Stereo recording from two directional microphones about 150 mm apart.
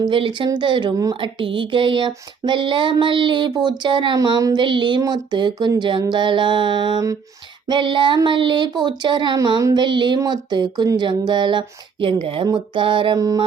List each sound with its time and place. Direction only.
0.0 s speech: 35° right (ahead or behind)
13.1 s music: 25° right (ahead or behind)